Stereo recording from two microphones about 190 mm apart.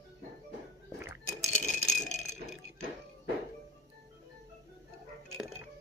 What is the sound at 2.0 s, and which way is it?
Rattle, 40° left (ahead or behind).